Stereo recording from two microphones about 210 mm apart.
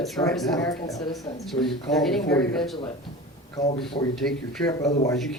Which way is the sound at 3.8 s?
Centre (ahead or behind).